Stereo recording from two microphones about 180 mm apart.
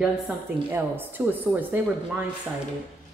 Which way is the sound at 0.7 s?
10° right (ahead or behind).